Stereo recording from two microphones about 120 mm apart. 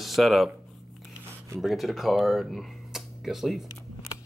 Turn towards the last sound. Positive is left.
turn(degrees=0)  # may be behind; listen again after turning